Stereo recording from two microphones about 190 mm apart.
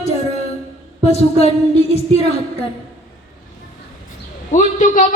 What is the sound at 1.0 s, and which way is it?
Speech, 35° left (ahead or behind).